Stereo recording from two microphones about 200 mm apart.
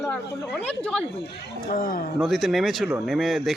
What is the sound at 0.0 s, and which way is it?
Speech, 5° left (ahead or behind).